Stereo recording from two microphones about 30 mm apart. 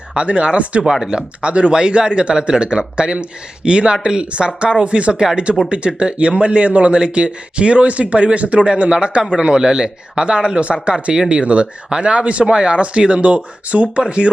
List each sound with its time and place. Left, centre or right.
0.1 s speech: right
0.9 s speech: right
1.1 s speech: right
10.6 s speech: right
10.9 s speech: right
11.3 s speech: right